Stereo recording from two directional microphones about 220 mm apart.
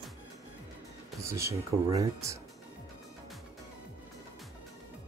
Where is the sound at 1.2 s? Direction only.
15° right (ahead or behind).